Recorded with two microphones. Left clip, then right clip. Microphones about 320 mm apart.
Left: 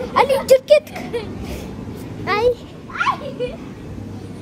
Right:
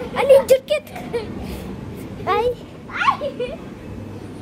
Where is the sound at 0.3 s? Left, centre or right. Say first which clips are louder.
Right 2 dB; centre.